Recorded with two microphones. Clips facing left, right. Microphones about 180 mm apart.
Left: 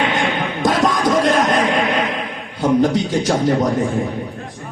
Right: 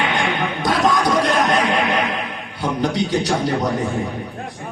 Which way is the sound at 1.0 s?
45° left (ahead or behind).